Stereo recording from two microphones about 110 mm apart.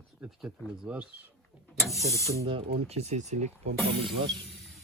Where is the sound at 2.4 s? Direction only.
60° right (ahead or behind); by 3.5 s 90° right.